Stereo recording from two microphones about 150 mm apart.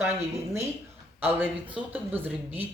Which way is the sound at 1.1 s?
10° right (ahead or behind).